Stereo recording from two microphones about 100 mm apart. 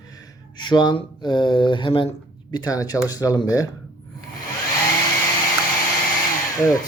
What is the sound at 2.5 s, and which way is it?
Speech, 40° left (ahead or behind).